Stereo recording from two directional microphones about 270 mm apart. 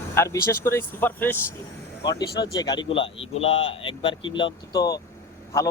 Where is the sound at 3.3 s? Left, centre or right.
Left.